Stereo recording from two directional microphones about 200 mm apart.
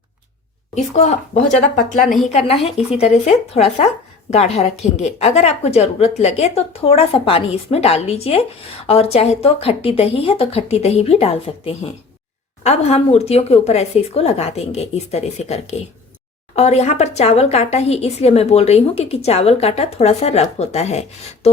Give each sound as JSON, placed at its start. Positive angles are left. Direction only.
{"t": 0.7, "sound": "speech", "side_deg": 35}